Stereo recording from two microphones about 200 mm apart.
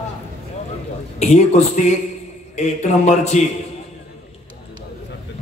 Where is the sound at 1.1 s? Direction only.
35° left (ahead or behind).